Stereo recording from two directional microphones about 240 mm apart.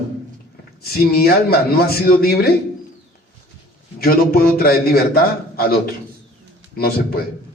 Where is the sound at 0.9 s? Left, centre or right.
Left.